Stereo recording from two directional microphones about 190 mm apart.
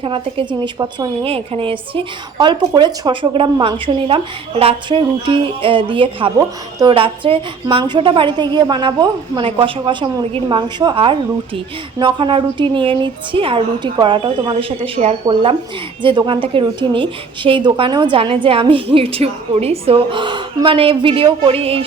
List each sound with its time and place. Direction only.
0.0 s a woman's voice: 30° right (ahead or behind)